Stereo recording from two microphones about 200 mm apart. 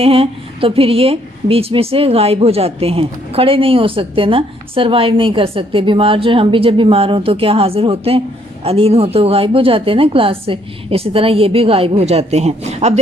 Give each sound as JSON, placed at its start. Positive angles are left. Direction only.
{"t": 0.0, "sound": "a woman's voice", "side_deg": -30}